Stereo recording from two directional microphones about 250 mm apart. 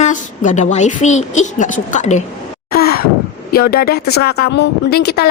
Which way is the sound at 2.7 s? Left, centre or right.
Left.